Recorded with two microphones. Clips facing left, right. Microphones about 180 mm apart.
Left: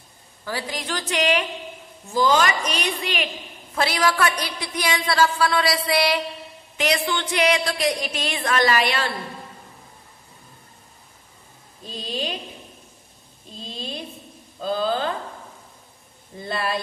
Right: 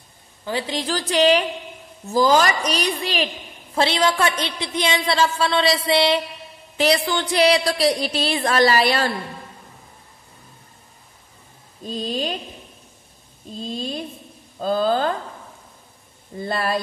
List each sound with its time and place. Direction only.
0.5 s a woman's voice: 25° right (ahead or behind)
6.8 s a woman's voice: 35° right (ahead or behind)
11.8 s speech: 45° right (ahead or behind)
14.6 s speech: 45° right (ahead or behind)
16.4 s speech: 45° right (ahead or behind)